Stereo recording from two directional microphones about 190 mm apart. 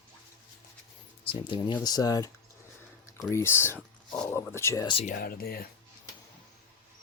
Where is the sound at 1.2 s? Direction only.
25° left (ahead or behind).